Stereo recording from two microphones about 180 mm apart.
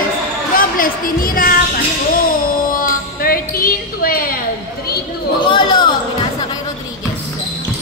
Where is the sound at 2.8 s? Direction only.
55° left (ahead or behind).